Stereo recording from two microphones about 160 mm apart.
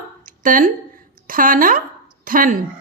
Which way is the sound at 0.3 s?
55° right (ahead or behind).